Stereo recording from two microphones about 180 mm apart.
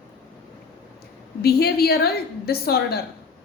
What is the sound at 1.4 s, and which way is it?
A woman's voice, 60° left (ahead or behind).